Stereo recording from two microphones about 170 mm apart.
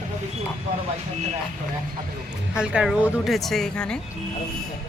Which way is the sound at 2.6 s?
5° right (ahead or behind).